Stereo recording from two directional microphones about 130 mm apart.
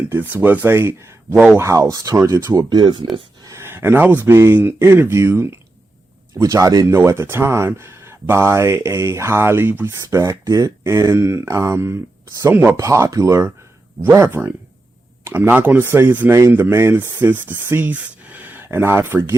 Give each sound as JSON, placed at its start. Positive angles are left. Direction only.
{"t": 0.1, "sound": "speech", "side_deg": -15}
{"t": 1.6, "sound": "speech", "side_deg": -25}
{"t": 3.4, "sound": "speech", "side_deg": -20}
{"t": 12.7, "sound": "speech", "side_deg": -25}